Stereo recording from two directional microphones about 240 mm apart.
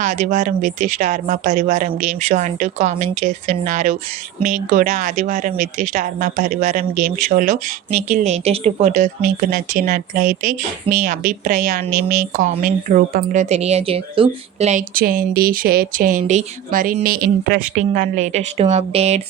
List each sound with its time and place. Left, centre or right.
0.3 s a woman's voice: right